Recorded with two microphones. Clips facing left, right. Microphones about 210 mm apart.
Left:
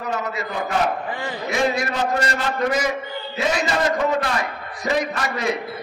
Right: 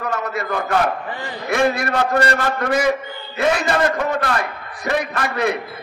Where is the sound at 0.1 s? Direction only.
60° right (ahead or behind).